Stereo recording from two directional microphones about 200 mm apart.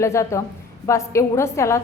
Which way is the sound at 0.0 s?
15° left (ahead or behind).